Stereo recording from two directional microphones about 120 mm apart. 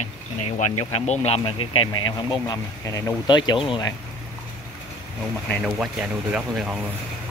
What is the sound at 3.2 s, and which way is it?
Speech, 40° left (ahead or behind).